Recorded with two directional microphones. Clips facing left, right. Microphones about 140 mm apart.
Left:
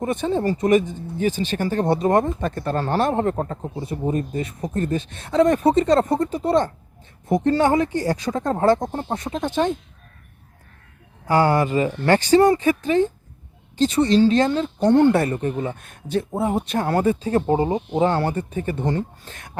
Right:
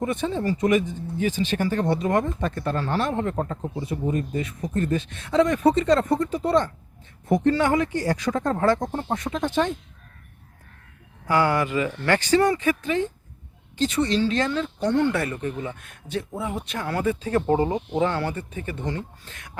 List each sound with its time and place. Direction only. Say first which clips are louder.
0.0 s speech: left 3 dB; 40° left (ahead or behind)
11.3 s speech: left 4 dB; 35° left (ahead or behind)